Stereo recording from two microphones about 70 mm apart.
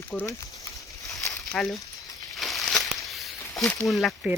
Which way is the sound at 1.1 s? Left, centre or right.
Left.